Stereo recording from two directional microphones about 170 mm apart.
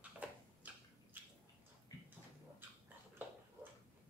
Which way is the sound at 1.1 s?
10° right (ahead or behind).